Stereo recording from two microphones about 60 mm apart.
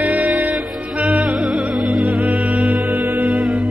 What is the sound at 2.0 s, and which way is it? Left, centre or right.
Music, right.